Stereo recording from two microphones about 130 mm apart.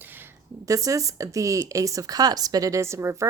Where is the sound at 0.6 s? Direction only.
25° right (ahead or behind).